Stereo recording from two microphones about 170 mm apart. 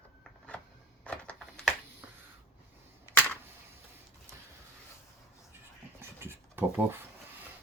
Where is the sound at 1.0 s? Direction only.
5° left (ahead or behind).